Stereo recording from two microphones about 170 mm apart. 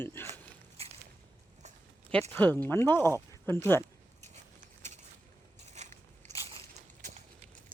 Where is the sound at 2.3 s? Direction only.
10° left (ahead or behind).